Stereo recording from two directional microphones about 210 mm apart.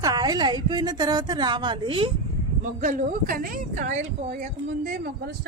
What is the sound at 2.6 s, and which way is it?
A woman's voice, 35° right (ahead or behind).